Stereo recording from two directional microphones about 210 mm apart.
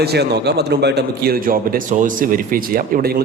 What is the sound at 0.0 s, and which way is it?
A man's voice, 50° right (ahead or behind).